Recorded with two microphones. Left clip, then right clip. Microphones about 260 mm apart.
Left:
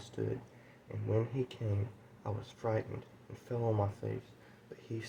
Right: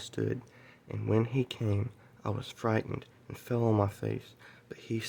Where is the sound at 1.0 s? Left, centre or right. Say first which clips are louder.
Right 5 dB; right.